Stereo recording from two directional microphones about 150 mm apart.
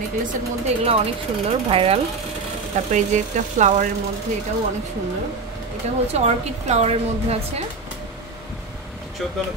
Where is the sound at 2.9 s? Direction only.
55° right (ahead or behind).